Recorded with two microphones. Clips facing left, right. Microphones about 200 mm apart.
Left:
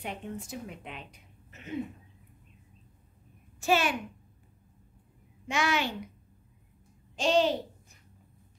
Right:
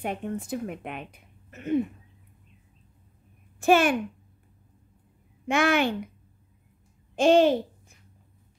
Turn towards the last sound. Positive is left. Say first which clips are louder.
# right 7 dB
turn(degrees=-55)  # may be behind; listen again after turning